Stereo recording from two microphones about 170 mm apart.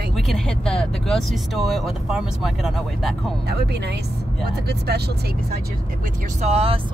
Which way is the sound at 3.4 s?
75° right (ahead or behind).